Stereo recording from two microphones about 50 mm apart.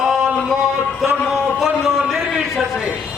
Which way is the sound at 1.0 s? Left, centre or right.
Centre.